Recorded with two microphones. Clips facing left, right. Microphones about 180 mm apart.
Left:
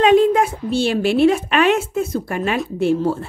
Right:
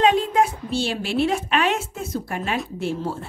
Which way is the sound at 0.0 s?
60° left (ahead or behind).